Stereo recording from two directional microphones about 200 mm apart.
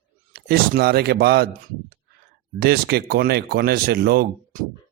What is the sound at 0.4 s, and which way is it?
Speech, 50° right (ahead or behind).